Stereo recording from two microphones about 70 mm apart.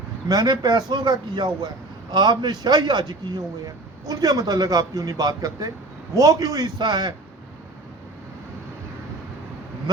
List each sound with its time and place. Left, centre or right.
0.3 s speech: right
4.0 s a man's voice: right